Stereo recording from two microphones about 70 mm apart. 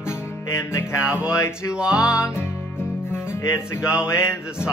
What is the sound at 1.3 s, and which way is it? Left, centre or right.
Mantra, left.